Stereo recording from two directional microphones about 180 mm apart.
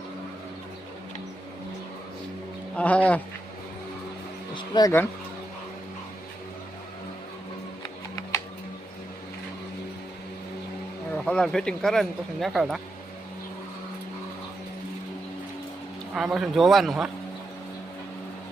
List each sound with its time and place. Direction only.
2.7 s speech: 10° left (ahead or behind)
4.5 s a sound: 25° left (ahead or behind)
11.3 s speech: 5° left (ahead or behind)
16.1 s speech: 5° right (ahead or behind)